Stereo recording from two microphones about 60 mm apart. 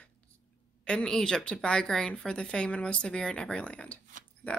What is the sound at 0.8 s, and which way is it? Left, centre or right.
Speech, centre.